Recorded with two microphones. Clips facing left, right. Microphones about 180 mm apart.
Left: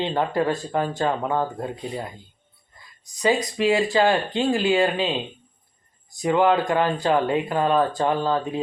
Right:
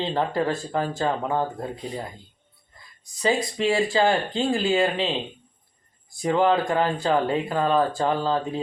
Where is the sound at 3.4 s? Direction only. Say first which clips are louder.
Left 2 dB; 30° right (ahead or behind).